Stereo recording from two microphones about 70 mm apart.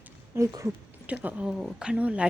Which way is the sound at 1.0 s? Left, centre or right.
Right.